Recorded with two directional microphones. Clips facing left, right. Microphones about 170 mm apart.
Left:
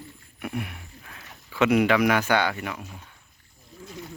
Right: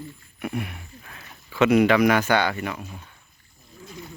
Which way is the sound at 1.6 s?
10° left (ahead or behind).